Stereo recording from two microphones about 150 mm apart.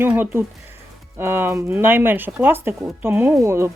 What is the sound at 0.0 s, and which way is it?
Speech, 15° right (ahead or behind).